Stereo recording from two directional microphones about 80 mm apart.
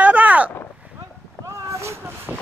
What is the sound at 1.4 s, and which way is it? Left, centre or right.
Boat, right.